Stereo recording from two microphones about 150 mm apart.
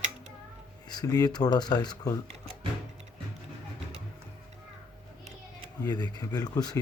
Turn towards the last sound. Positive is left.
turn(degrees=25)  # may be behind; listen again after turning